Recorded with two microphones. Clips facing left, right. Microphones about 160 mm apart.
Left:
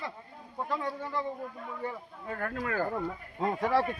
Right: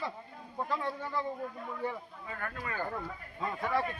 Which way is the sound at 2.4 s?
80° left.